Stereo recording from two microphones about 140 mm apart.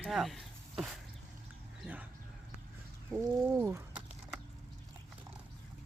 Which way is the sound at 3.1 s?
15° right (ahead or behind).